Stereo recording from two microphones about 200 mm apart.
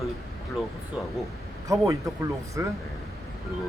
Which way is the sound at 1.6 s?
15° right (ahead or behind).